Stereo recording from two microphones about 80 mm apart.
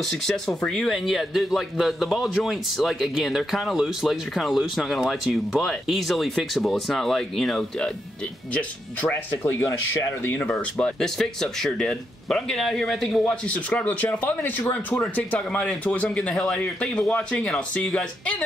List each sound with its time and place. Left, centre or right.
0.0 s speech: centre
9.4 s speech: left
9.7 s speech: left
10.6 s speech: centre
13.5 s speech: centre